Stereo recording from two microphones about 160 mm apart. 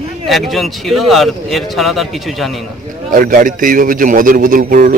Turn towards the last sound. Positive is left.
turn(degrees=-60)  # may be behind; listen again after turning